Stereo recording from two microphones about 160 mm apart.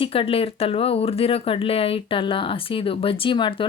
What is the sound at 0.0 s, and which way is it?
Speech, 35° left (ahead or behind).